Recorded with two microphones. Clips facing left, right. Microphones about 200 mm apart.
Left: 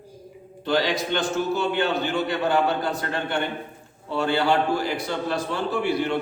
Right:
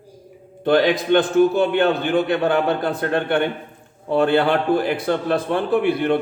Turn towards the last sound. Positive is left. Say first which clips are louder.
# right 6 dB
turn(degrees=-55)  # may be behind; listen again after turning